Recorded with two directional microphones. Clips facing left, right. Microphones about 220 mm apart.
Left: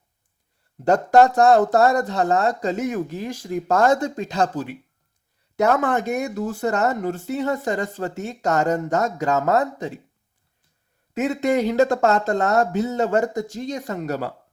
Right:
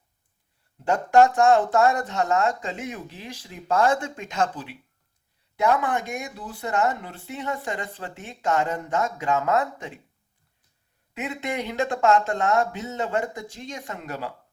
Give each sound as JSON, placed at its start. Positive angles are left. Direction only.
{"t": 1.1, "sound": "speech", "side_deg": 35}
{"t": 11.1, "sound": "speech", "side_deg": 40}